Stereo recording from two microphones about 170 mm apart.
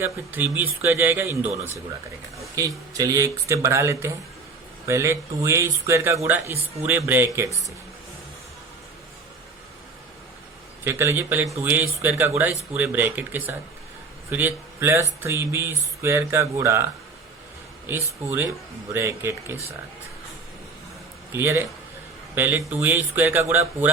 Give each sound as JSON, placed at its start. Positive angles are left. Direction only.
{"t": 0.0, "sound": "speech", "side_deg": -10}
{"t": 2.6, "sound": "speech", "side_deg": -20}
{"t": 10.8, "sound": "speech", "side_deg": -15}
{"t": 21.3, "sound": "speech", "side_deg": -15}
{"t": 22.6, "sound": "speech", "side_deg": -10}